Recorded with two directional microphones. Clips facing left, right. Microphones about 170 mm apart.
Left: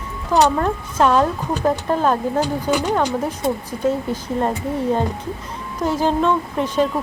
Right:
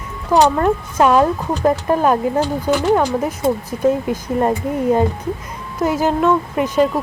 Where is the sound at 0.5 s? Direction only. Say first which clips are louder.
Right 4 dB; 5° right (ahead or behind).